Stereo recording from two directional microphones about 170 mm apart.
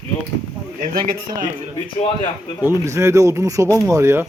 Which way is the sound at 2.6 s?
15° right (ahead or behind).